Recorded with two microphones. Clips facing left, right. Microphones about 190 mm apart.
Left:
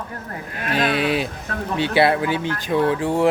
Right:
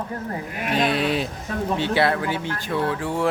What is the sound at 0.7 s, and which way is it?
Speech, centre (ahead or behind).